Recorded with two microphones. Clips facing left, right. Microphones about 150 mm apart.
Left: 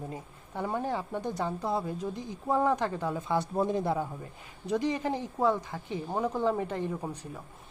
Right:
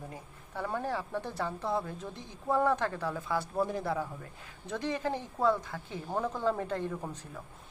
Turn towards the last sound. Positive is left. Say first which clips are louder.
# left 3 dB
turn(degrees=15)  # may be behind; listen again after turning